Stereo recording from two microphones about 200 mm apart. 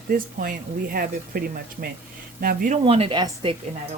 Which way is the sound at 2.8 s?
30° right (ahead or behind).